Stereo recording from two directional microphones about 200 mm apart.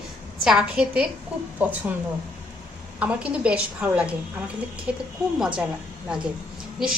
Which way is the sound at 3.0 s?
5° right (ahead or behind).